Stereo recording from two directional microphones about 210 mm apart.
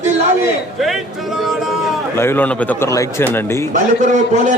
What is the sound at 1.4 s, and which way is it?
Speech, centre (ahead or behind).